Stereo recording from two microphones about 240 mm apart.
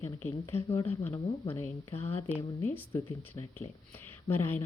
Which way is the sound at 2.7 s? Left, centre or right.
Centre.